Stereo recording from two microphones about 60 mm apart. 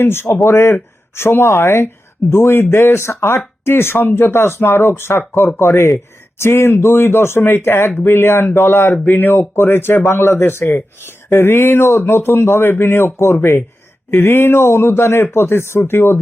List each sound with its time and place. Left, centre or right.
0.0 s speech: left